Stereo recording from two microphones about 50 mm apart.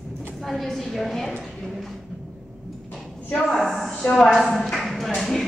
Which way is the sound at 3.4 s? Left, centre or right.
Centre.